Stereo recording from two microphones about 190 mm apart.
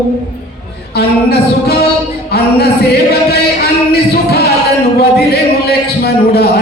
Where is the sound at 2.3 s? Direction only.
55° left (ahead or behind).